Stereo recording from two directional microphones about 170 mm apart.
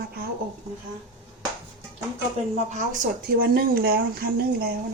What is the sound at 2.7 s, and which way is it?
Speech, 55° right (ahead or behind).